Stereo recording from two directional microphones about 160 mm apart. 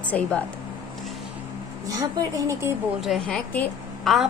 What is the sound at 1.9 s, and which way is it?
Speech, 20° right (ahead or behind).